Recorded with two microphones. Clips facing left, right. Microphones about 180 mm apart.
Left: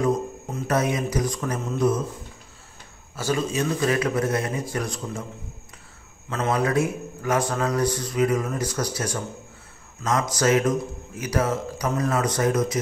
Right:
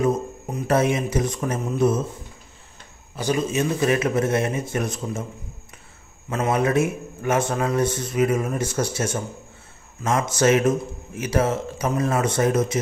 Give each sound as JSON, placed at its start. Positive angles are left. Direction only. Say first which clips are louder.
{"t": 0.0, "sound": "a sound", "louder": "right 1 dB", "side_deg": -15}
{"t": 0.7, "sound": "a man's voice", "louder": "right 3 dB", "side_deg": -25}
{"t": 3.2, "sound": "a man's voice", "louder": "right 2 dB", "side_deg": -20}
{"t": 6.2, "sound": "a man's voice", "louder": "right 2 dB", "side_deg": -25}